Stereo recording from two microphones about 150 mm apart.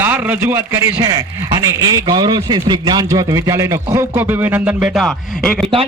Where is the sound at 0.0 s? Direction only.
10° right (ahead or behind).